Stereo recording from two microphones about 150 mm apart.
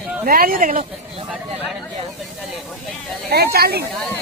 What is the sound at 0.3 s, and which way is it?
Speech, 70° right (ahead or behind).